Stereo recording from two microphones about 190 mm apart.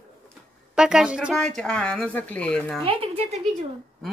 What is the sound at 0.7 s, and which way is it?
Speech, 5° right (ahead or behind).